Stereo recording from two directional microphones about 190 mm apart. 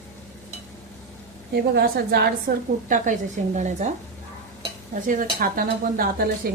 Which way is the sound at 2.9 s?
40° right (ahead or behind).